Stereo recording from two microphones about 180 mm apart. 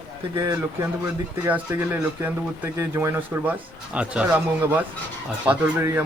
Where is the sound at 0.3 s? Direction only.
20° right (ahead or behind).